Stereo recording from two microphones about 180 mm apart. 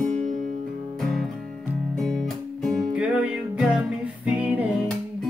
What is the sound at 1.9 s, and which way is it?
Music, centre (ahead or behind).